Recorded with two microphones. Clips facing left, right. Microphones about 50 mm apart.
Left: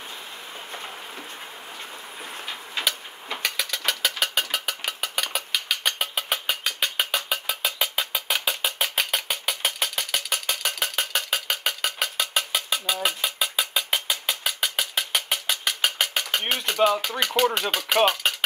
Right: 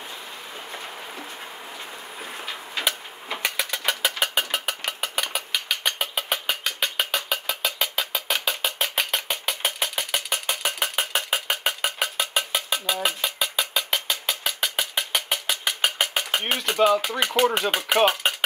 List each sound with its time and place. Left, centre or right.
3.3 s mechanisms: centre
7.2 s music: centre
17.0 s speech: centre
18.2 s a sound: centre